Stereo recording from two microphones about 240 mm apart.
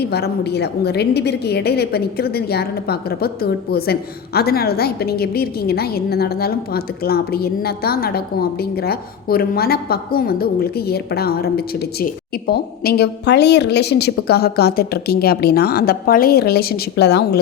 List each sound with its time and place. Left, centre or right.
0.0 s a woman's voice: left